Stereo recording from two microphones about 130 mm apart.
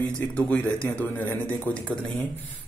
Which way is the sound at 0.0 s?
10° left (ahead or behind).